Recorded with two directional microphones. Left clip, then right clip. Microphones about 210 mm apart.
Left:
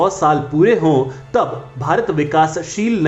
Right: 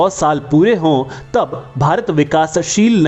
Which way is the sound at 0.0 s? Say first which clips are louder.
Right 1 dB; 40° right (ahead or behind).